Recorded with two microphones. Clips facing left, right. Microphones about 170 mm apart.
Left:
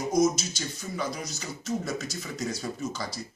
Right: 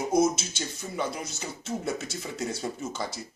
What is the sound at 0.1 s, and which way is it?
Speech, 25° right (ahead or behind).